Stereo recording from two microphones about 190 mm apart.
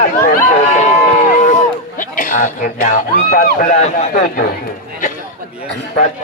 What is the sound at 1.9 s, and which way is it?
Speech, 45° left (ahead or behind).